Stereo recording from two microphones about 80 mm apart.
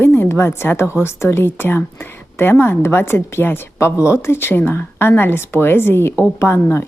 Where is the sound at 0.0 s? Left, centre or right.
Left.